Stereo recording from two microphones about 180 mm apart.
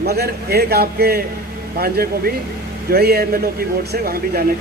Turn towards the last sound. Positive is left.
turn(degrees=-55)  # may be behind; listen again after turning